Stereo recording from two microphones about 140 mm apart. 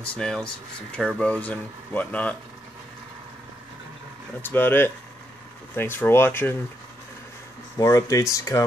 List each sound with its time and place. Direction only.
0.1 s speech: 5° left (ahead or behind)
4.4 s speech: 15° left (ahead or behind)
7.7 s speech: 20° left (ahead or behind)